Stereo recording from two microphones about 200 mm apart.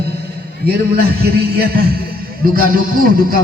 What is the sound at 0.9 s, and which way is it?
Speech, 50° right (ahead or behind).